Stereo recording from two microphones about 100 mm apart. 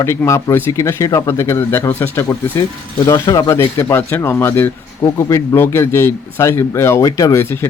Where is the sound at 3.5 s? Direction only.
25° left (ahead or behind).